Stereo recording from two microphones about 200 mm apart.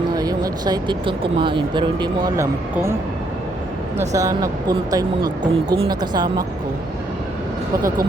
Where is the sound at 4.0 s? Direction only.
15° right (ahead or behind).